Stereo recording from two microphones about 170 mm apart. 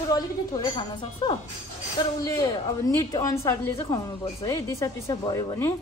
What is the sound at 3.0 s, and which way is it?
A woman's voice, 15° left (ahead or behind).